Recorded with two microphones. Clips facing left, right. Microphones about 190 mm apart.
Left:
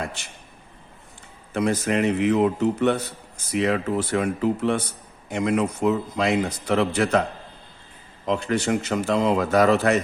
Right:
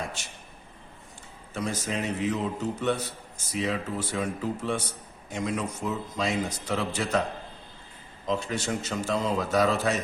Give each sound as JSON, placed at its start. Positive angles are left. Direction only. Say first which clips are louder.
{"t": 1.5, "sound": "a man's voice", "louder": "left 9 dB", "side_deg": 60}
{"t": 8.3, "sound": "a man's voice", "louder": "left 6 dB", "side_deg": 65}